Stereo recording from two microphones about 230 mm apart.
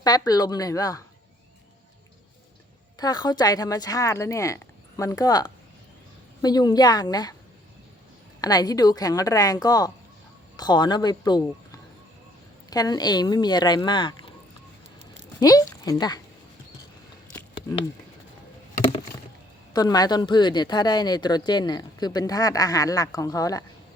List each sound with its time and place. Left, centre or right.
0.0 s speech: centre
3.0 s speech: centre
8.4 s speech: centre
15.4 s speech: centre
18.8 s rowboat: left
19.7 s speech: centre